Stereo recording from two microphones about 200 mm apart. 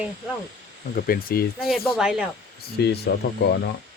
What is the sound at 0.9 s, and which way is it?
Speech, 45° left (ahead or behind).